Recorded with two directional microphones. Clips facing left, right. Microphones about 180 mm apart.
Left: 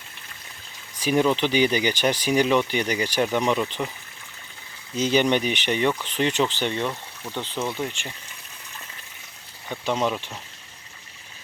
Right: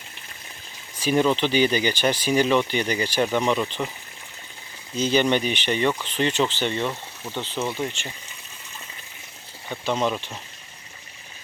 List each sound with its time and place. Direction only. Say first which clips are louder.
0.9 s speech: even; 10° left (ahead or behind)
4.9 s speech: even; 15° left (ahead or behind)
6.8 s speech: right 1 dB; 5° right (ahead or behind)
9.8 s speech: even; 10° left (ahead or behind)